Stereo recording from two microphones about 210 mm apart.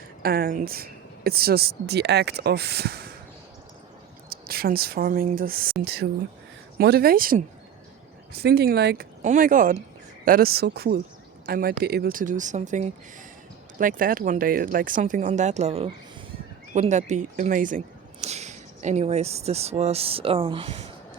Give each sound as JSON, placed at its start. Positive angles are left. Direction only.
{"t": 0.2, "sound": "speech", "side_deg": -45}
{"t": 4.3, "sound": "speech", "side_deg": -45}
{"t": 9.2, "sound": "speech", "side_deg": -40}